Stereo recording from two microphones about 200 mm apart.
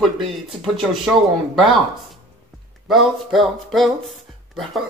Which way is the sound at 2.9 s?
Centre (ahead or behind).